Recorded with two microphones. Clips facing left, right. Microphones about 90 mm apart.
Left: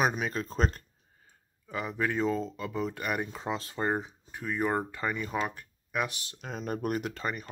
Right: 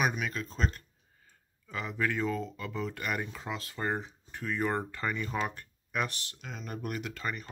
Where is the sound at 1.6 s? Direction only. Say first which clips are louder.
Left 1 dB; 20° left (ahead or behind).